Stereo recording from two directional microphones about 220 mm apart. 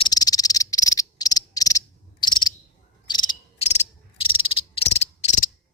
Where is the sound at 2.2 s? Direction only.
20° left (ahead or behind).